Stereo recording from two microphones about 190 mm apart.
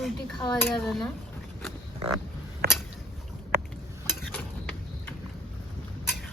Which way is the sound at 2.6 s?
55° right (ahead or behind).